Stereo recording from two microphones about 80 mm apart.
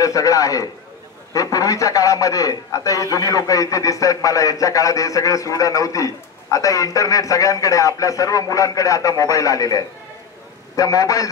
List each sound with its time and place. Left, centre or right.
0.0 s a man's voice: left